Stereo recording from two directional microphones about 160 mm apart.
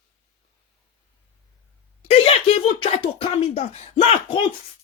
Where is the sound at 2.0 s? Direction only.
35° left (ahead or behind).